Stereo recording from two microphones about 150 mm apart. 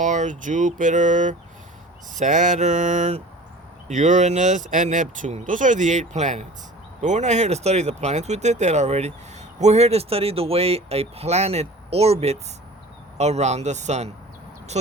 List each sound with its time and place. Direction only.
0.0 s speech: 55° right (ahead or behind)